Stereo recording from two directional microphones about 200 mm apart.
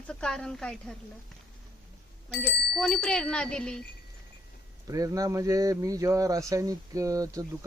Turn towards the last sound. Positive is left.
turn(degrees=-15)  # may be behind; listen again after turning